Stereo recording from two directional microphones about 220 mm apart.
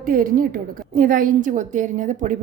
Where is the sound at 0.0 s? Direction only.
40° right (ahead or behind).